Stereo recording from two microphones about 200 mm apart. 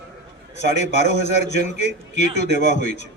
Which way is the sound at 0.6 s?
35° left (ahead or behind).